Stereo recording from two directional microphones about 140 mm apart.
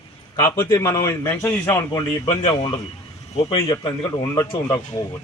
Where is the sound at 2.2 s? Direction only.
45° left (ahead or behind).